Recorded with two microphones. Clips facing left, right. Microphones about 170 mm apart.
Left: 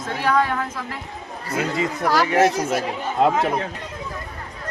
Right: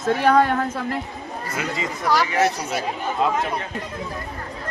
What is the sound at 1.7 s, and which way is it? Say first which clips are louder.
Speech: left 1 dB; 55° left (ahead or behind).